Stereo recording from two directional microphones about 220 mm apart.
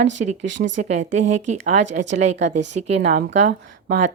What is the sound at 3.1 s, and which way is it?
Speech, 35° right (ahead or behind).